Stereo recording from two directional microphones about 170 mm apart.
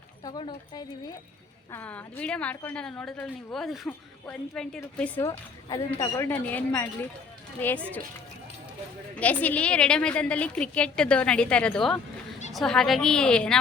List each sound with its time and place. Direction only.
0.3 s speech: 25° left (ahead or behind)
1.7 s a woman's voice: 10° left (ahead or behind)
5.6 s a woman's voice: 20° left (ahead or behind)
9.1 s a woman's voice: 10° left (ahead or behind)